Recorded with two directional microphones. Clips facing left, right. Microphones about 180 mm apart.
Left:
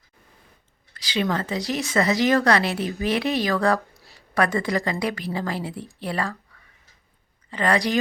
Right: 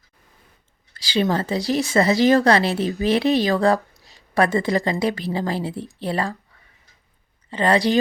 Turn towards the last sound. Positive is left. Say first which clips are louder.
# right 3 dB
turn(degrees=-25)  # may be behind; listen again after turning